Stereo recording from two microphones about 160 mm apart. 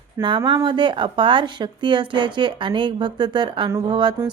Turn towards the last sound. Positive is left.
turn(degrees=-25)  # may be behind; listen again after turning